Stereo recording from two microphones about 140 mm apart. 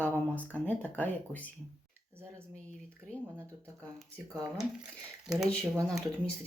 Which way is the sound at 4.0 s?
Centre (ahead or behind).